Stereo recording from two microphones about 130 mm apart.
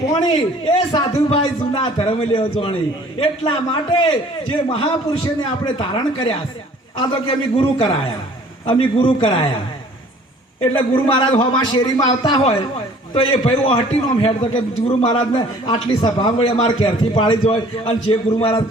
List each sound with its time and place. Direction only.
0.2 s a man's voice: 40° left (ahead or behind)
10.6 s a man's voice: 45° left (ahead or behind)
12.4 s a man's voice: 50° left (ahead or behind)